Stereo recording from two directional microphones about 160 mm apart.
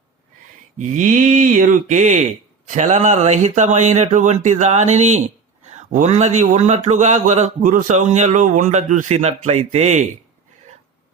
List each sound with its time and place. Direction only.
0.8 s speech: 55° right (ahead or behind)